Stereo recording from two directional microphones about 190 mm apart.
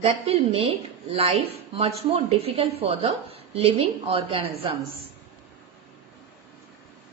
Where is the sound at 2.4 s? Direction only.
30° right (ahead or behind).